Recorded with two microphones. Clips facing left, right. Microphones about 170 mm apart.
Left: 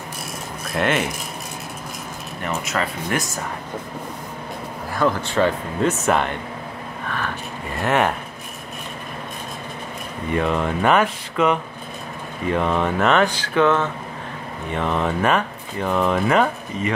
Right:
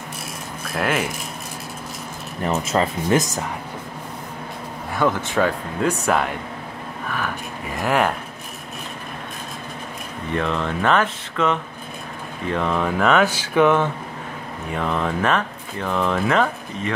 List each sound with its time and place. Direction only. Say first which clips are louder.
0.7 s speech: left 2 dB; centre (ahead or behind)
2.4 s speech: right 4 dB; 30° right (ahead or behind)
4.9 s speech: even; 5° right (ahead or behind)
7.8 s speech: even; centre (ahead or behind)
10.3 s speech: left 2 dB; 5° left (ahead or behind); by 13.9 s 10° right (ahead or behind)
14.7 s speech: left 1 dB; centre (ahead or behind)